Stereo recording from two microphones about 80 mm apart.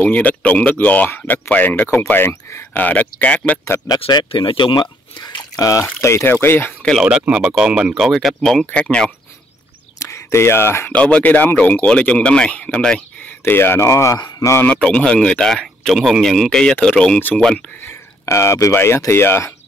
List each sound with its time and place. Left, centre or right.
0.0 s speech: centre
3.8 s speech: left
5.6 s speech: left
7.0 s speech: centre
8.0 s speech: centre
9.9 s a sound: left
10.9 s speech: centre
13.4 s speech: left
14.7 s speech: centre
17.8 s speech: left